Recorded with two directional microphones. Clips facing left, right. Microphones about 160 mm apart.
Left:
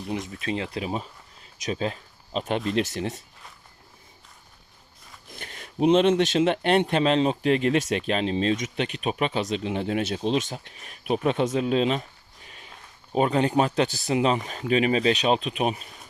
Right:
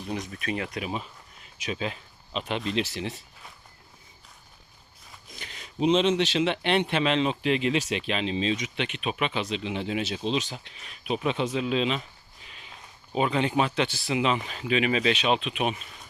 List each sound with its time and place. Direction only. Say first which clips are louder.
0.1 s speech: left 2 dB; 25° left (ahead or behind); by 3.2 s 50° left (ahead or behind)
5.3 s speech: left 4 dB; 50° left (ahead or behind)
13.1 s speech: left 3 dB; 40° left (ahead or behind)